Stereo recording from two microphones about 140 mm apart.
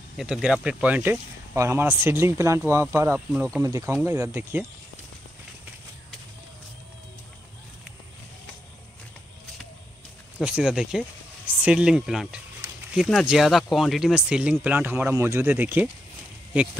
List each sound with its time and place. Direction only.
0.2 s speech: 5° right (ahead or behind)
10.4 s speech: 5° right (ahead or behind)